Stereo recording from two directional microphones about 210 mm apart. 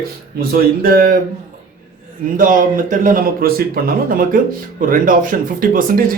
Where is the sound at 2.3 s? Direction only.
40° right (ahead or behind).